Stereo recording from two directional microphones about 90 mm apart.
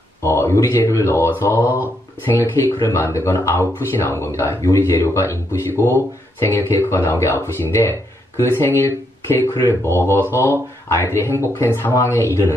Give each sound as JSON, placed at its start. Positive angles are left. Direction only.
{"t": 0.2, "sound": "speech", "side_deg": 30}